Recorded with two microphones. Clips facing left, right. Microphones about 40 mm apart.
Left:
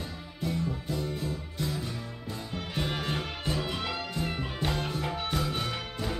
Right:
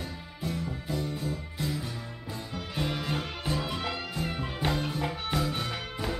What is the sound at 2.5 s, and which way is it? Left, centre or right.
Music, centre.